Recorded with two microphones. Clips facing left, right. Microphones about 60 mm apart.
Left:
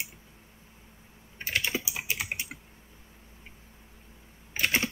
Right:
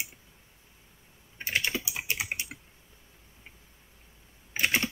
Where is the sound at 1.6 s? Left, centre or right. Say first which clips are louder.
Even; centre.